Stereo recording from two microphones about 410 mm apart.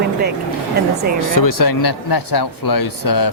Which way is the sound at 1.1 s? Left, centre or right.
Left.